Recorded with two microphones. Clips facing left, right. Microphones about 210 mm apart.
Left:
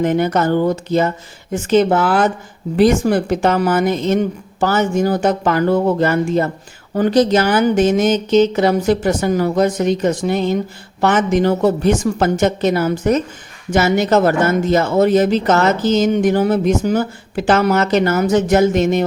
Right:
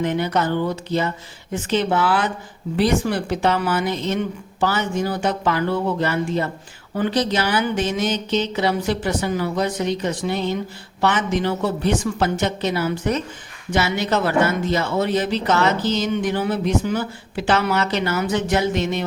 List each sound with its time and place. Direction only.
0.0 s speech: 45° left (ahead or behind)